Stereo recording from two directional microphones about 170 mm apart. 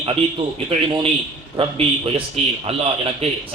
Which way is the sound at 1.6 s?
35° right (ahead or behind).